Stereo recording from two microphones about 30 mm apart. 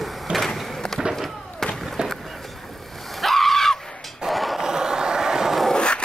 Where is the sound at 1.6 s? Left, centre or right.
Centre.